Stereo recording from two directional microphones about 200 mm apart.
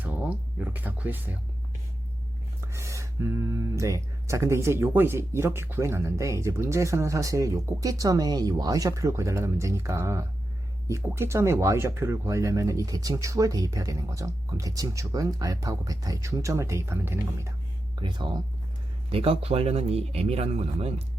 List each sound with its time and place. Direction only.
0.0 s a sound: 10° right (ahead or behind)
2.7 s speech: 15° right (ahead or behind)
18.0 s speech: 25° right (ahead or behind)